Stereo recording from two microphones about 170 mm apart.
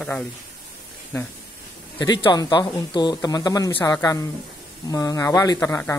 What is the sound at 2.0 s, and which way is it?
Speech, 25° left (ahead or behind).